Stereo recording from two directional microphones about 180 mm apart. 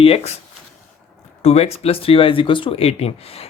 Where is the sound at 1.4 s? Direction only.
35° left (ahead or behind).